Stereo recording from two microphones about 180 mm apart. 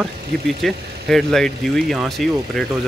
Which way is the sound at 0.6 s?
Centre (ahead or behind).